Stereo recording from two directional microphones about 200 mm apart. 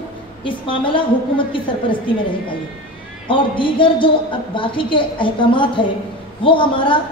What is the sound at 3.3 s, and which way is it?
A woman's voice, 25° left (ahead or behind).